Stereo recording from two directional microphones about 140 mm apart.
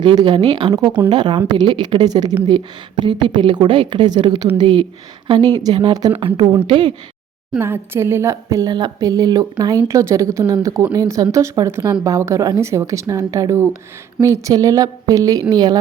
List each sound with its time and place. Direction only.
0.0 s a woman's voice: 35° right (ahead or behind)
7.6 s speech: 15° right (ahead or behind)